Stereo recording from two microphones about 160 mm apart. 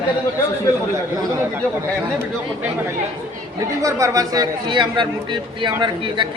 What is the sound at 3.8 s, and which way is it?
A man's voice, 20° right (ahead or behind).